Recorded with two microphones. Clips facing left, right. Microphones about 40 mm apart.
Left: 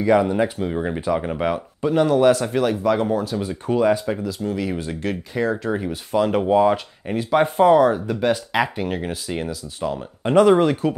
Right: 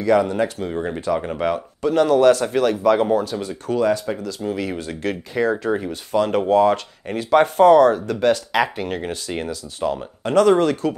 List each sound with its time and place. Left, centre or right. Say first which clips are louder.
0.0 s speech: even; centre
3.4 s speech: left 5 dB; centre
4.5 s speech: right 1 dB; centre
8.7 s speech: even; centre
10.2 s speech: left 1 dB; centre